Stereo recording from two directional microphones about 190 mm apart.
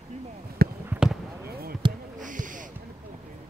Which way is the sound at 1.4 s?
55° right (ahead or behind).